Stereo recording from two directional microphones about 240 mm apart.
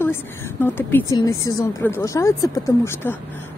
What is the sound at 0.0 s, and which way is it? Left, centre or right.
Speech, centre.